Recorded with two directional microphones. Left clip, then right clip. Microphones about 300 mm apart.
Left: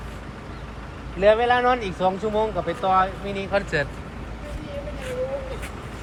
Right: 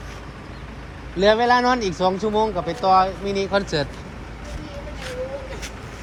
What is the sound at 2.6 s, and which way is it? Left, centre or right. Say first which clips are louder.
Speech: right 5 dB; centre.